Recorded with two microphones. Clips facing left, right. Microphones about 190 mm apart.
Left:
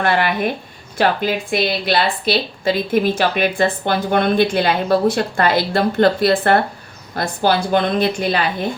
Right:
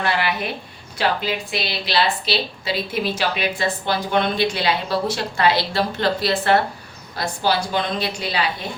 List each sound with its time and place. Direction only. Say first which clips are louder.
0.0 s a woman's voice: left 5 dB; 50° left (ahead or behind)